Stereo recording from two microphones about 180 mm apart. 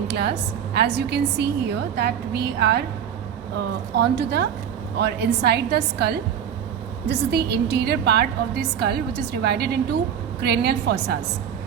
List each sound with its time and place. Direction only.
0.1 s a woman's voice: 70° right (ahead or behind)
3.9 s a woman's voice: 70° right (ahead or behind)